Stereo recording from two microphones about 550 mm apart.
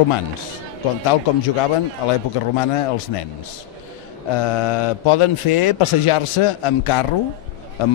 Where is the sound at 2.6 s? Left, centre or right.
Left.